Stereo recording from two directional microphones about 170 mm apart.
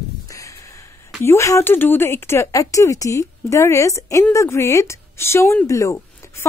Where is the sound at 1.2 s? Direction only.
15° left (ahead or behind).